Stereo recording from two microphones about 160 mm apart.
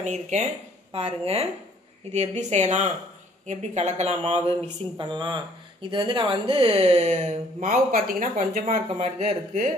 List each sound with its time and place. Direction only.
0.0 s speech: 45° right (ahead or behind)